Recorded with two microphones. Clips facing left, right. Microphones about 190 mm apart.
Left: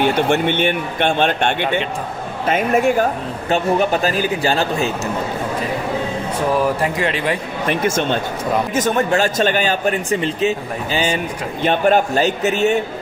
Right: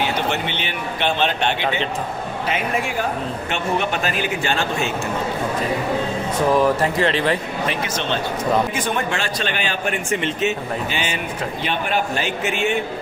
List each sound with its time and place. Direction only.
0.0 s speech: 50° left (ahead or behind); by 4.9 s 35° left (ahead or behind)
6.6 s speech: 15° left (ahead or behind)
7.7 s speech: 50° left (ahead or behind)